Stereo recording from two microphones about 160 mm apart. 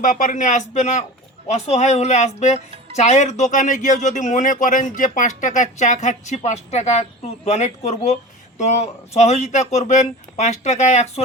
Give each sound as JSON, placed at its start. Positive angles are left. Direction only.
{"t": 0.0, "sound": "speech", "side_deg": 55}